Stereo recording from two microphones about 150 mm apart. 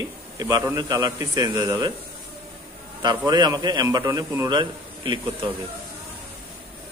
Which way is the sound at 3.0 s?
30° right (ahead or behind).